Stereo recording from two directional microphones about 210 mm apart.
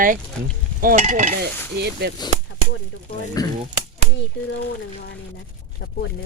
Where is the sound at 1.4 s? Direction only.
50° right (ahead or behind).